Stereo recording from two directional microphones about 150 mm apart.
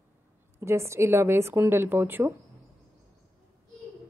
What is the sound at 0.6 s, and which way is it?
A woman's voice, 20° right (ahead or behind).